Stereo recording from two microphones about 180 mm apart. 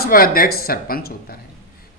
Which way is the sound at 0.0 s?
55° left (ahead or behind).